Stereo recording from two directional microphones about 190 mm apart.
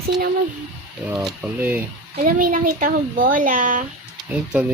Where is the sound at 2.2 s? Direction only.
45° right (ahead or behind).